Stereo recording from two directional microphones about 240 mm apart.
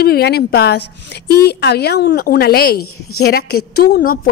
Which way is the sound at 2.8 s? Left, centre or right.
Left.